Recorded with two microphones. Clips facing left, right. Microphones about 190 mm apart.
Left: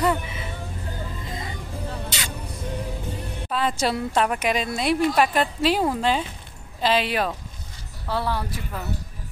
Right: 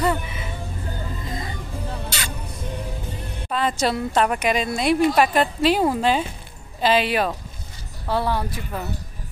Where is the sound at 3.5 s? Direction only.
Centre (ahead or behind).